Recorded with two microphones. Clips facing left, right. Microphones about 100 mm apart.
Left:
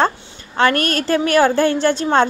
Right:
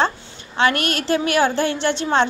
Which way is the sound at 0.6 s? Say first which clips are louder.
Left 3 dB; 40° left (ahead or behind).